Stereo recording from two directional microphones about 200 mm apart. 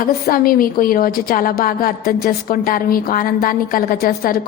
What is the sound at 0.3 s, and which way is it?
A woman's voice, 45° left (ahead or behind).